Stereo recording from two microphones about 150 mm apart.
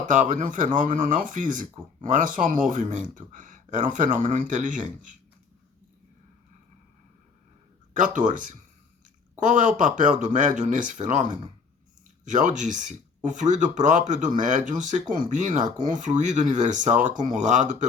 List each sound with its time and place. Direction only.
0.1 s speech: 60° right (ahead or behind)
7.9 s speech: 60° right (ahead or behind)